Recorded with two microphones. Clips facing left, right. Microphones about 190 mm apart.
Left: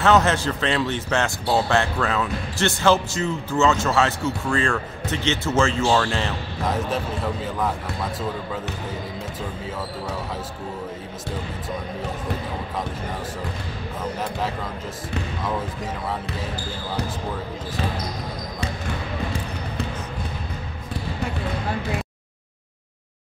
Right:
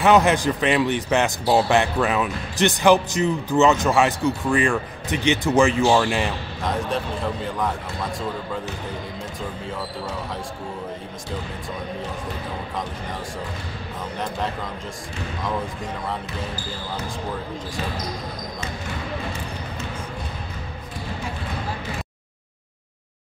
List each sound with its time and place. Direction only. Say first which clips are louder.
0.0 s speech: right 2 dB; 15° right (ahead or behind)
7.4 s a man's voice: left 1 dB; centre (ahead or behind)